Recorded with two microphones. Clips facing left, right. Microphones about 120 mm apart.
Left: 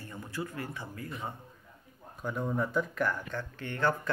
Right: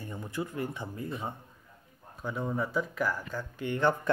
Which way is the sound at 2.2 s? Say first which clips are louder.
Even; 5° right (ahead or behind).